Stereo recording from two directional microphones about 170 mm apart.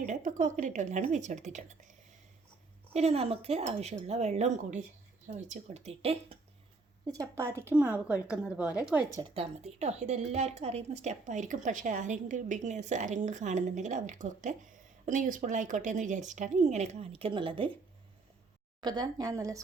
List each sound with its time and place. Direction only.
0.0 s a woman's voice: 50° right (ahead or behind)
7.1 s speech: 20° right (ahead or behind)
9.3 s a woman's voice: 35° right (ahead or behind)
18.8 s speech: 25° right (ahead or behind)